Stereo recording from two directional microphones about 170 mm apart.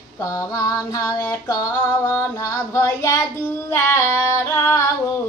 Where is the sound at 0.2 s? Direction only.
20° left (ahead or behind).